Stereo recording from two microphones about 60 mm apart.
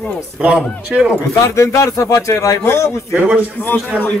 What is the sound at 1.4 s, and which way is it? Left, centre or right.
Speech, left.